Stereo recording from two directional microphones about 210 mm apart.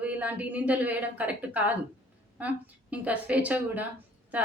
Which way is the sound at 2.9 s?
5° right (ahead or behind).